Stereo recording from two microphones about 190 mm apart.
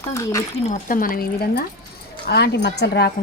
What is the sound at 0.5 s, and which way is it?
A woman's voice, 40° left (ahead or behind).